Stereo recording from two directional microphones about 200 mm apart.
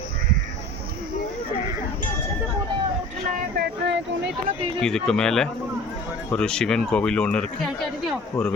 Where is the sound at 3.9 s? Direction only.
60° right (ahead or behind).